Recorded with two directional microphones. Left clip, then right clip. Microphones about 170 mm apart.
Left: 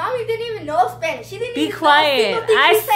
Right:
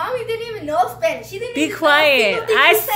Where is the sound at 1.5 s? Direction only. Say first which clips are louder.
Left 1 dB; centre (ahead or behind).